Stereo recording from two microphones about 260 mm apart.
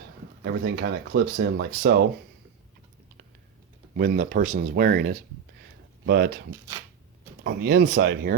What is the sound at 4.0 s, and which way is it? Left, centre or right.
Speech, right.